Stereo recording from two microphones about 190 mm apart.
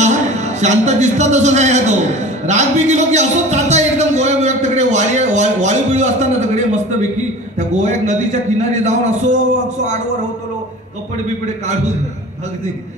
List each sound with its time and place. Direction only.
0.0 s a man's voice: 35° right (ahead or behind)
11.4 s a man's voice: 40° right (ahead or behind)